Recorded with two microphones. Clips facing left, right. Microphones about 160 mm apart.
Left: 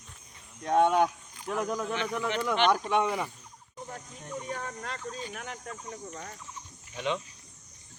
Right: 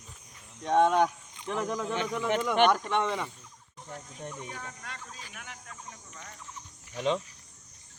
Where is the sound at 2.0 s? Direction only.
20° right (ahead or behind).